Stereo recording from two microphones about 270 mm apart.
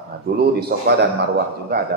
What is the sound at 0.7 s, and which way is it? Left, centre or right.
Speech, right.